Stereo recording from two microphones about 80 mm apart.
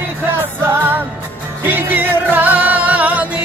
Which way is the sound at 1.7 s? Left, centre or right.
Right.